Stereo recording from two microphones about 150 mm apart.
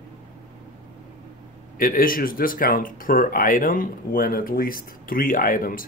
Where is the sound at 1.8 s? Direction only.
75° left (ahead or behind).